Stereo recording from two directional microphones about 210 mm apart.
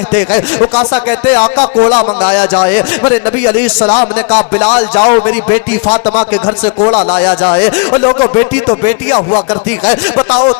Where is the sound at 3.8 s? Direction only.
30° left (ahead or behind).